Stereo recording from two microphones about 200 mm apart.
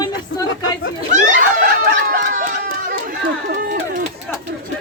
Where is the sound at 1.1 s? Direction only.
40° right (ahead or behind).